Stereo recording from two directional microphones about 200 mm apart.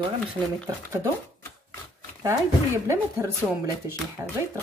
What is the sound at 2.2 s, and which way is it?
Speech, 15° right (ahead or behind).